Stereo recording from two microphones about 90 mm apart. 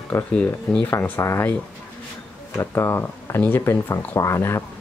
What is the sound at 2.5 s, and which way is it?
Speech, 30° left (ahead or behind).